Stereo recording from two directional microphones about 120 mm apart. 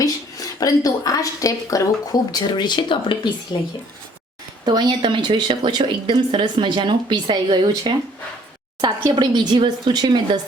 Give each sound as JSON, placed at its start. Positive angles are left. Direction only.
{"t": 0.0, "sound": "a woman's voice", "side_deg": 30}
{"t": 2.3, "sound": "speech", "side_deg": 40}
{"t": 4.6, "sound": "a woman's voice", "side_deg": -40}